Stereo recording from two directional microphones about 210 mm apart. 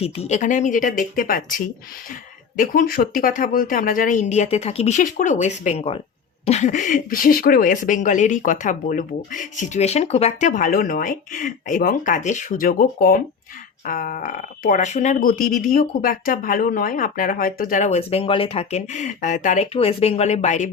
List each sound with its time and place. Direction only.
0.0 s speech: 30° left (ahead or behind)